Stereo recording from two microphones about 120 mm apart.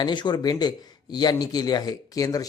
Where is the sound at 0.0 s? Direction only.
40° left (ahead or behind).